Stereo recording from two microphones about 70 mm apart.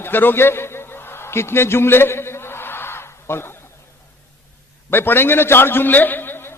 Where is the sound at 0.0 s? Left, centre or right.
Left.